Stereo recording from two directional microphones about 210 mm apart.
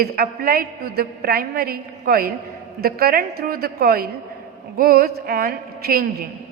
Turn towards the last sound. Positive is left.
turn(degrees=-45)  # may be behind; listen again after turning